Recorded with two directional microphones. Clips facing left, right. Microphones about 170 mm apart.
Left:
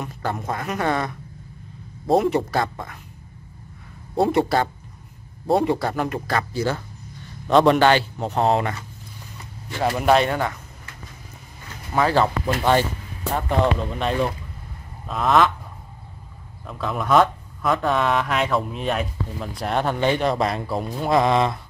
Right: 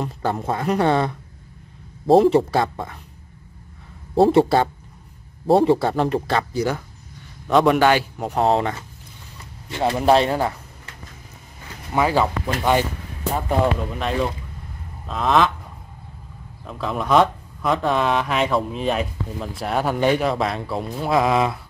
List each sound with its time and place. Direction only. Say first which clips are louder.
0.0 s speech: right 4 dB; 25° right (ahead or behind)
4.1 s speech: right 4 dB; 30° right (ahead or behind)
7.4 s speech: even; 5° right (ahead or behind); by 10.6 s 30° right (ahead or behind)
11.9 s speech: even; 10° right (ahead or behind)
16.6 s speech: right 1 dB; centre (ahead or behind)